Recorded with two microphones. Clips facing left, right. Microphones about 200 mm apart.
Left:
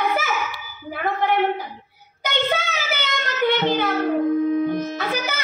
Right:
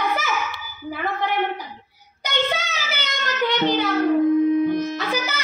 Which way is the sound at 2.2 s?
55° left (ahead or behind).